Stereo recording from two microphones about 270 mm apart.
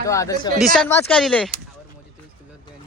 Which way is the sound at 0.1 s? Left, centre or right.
Centre.